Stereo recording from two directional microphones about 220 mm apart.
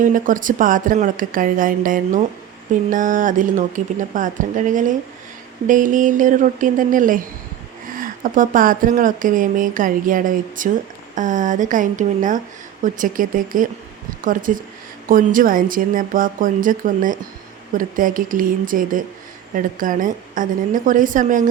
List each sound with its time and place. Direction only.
0.0 s speech: 35° right (ahead or behind)